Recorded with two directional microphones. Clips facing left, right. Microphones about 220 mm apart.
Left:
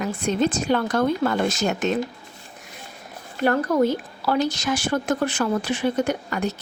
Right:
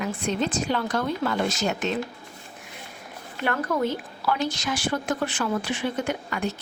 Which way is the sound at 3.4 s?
40° left (ahead or behind).